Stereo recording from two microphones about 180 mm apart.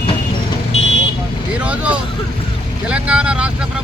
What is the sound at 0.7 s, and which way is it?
Vehicle, 35° left (ahead or behind).